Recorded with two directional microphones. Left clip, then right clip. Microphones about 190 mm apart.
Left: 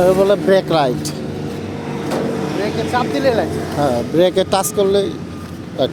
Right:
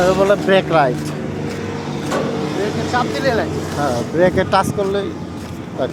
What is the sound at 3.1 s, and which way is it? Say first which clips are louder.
Speech: left 2 dB; 35° left (ahead or behind).